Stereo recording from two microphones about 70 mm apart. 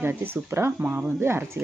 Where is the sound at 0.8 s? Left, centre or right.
Right.